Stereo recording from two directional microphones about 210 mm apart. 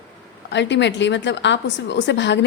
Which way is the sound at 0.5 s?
55° left (ahead or behind).